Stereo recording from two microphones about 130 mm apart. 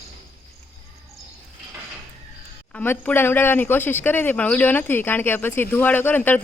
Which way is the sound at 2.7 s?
15° left (ahead or behind).